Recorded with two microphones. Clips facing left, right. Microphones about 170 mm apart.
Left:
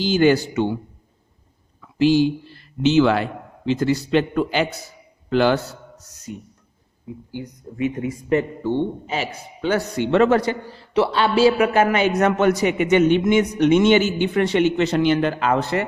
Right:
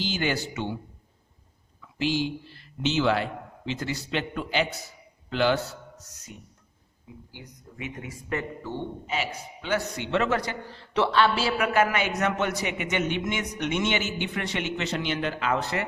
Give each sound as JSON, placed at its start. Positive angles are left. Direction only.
{"t": 0.0, "sound": "a man's voice", "side_deg": 40}
{"t": 2.0, "sound": "speech", "side_deg": 40}
{"t": 3.7, "sound": "a man's voice", "side_deg": 40}
{"t": 6.3, "sound": "a man's voice", "side_deg": 35}
{"t": 8.0, "sound": "a man's voice", "side_deg": 25}
{"t": 10.8, "sound": "speech", "side_deg": 5}
{"t": 11.1, "sound": "a man's voice", "side_deg": 15}